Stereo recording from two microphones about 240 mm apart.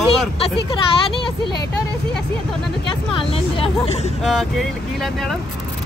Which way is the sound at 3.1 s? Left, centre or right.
Left.